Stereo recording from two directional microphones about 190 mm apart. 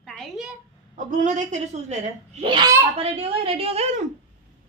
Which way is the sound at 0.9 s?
40° right (ahead or behind).